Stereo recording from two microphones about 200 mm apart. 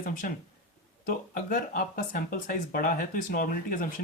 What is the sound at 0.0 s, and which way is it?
Speech, 45° left (ahead or behind).